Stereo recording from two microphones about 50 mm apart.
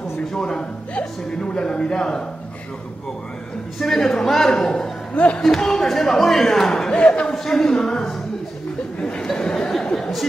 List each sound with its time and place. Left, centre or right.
0.3 s a man's voice: centre
3.8 s a man's voice: centre
5.1 s speech: left
5.4 s a man's voice: centre
9.0 s a sound: centre